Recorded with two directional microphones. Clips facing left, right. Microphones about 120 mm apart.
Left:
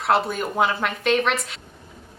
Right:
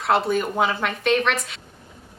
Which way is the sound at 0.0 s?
Centre (ahead or behind).